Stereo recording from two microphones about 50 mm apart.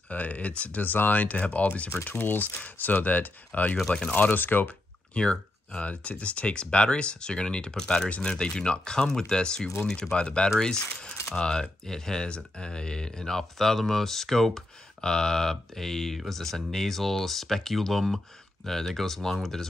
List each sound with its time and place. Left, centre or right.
0.1 s speech: left
2.0 s speech: left
3.7 s speech: centre
4.0 s speech: left
4.6 s speech: left